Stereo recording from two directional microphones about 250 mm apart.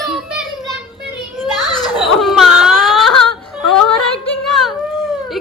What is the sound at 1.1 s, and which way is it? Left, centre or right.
Child singing, centre.